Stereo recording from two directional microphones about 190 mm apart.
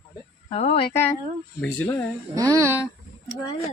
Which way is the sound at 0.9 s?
10° left (ahead or behind).